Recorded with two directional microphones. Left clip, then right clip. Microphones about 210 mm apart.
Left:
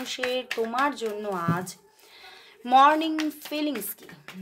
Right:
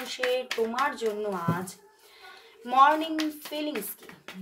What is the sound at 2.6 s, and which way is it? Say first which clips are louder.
Speech: left 3 dB; 55° left (ahead or behind).